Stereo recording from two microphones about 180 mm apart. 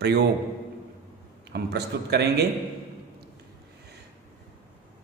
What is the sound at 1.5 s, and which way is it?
Speech, 65° right (ahead or behind).